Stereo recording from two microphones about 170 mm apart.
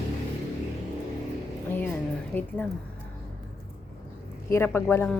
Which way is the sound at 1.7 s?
10° left (ahead or behind).